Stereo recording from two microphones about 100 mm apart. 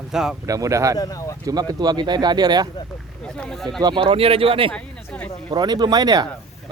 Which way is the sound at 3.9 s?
70° right (ahead or behind).